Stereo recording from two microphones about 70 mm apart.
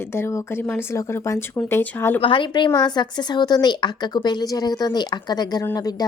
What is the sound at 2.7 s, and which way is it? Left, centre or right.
A woman's voice, left.